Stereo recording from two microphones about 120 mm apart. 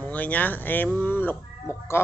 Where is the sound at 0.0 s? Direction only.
15° left (ahead or behind).